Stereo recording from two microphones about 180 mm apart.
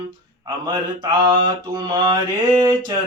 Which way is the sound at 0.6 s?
25° right (ahead or behind).